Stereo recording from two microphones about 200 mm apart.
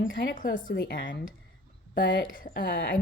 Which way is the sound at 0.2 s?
50° left (ahead or behind).